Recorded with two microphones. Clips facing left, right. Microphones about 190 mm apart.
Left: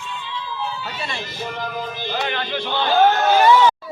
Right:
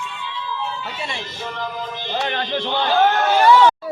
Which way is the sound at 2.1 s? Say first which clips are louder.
Right 2 dB; 20° right (ahead or behind).